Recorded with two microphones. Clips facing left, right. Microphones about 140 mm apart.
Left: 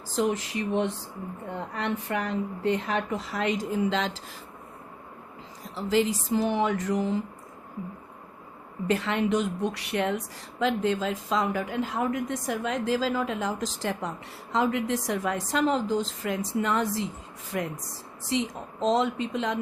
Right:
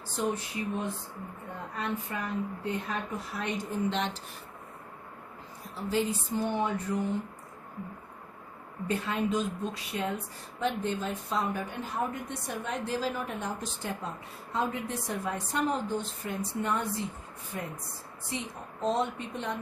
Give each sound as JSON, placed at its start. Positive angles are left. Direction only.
{"t": 0.1, "sound": "speech", "side_deg": 90}
{"t": 5.7, "sound": "speech", "side_deg": 90}
{"t": 8.9, "sound": "speech", "side_deg": 85}